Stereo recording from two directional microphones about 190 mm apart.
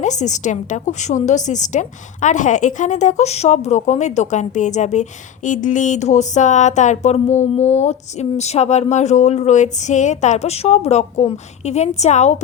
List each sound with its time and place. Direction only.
0.0 s a woman's voice: 40° left (ahead or behind)